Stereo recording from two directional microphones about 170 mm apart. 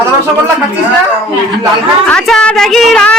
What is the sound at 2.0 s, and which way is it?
A child's voice, 5° left (ahead or behind).